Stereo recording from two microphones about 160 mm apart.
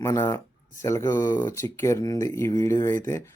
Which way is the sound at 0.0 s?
20° left (ahead or behind).